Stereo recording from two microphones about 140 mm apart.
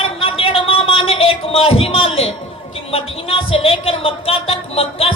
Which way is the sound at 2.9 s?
40° left (ahead or behind).